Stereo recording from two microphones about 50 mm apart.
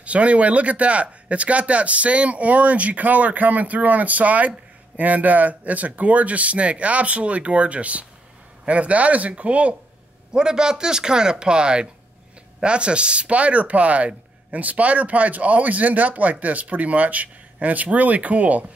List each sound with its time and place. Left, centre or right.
0.0 s speech: right
10.3 s speech: centre